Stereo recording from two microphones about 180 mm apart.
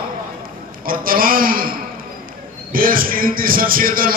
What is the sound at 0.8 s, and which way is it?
Speech, 50° right (ahead or behind).